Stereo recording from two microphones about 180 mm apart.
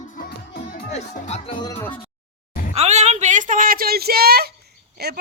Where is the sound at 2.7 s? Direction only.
40° right (ahead or behind).